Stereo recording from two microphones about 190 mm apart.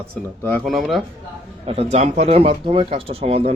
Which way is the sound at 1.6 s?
30° right (ahead or behind).